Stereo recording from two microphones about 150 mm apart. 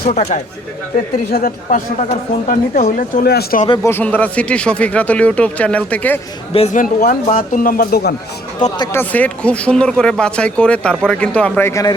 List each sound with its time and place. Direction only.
0.1 s speech: 50° left (ahead or behind)
1.3 s speech: 70° left (ahead or behind)
2.0 s speech: 55° left (ahead or behind); by 3.6 s 80° left
3.8 s speech: 15° left (ahead or behind)
6.7 s speech: 65° left (ahead or behind); by 8.1 s 90° left
8.9 s speech: 10° left (ahead or behind)
11.7 s a man's voice: 25° left (ahead or behind)